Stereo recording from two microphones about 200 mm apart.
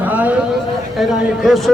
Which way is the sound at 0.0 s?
10° right (ahead or behind).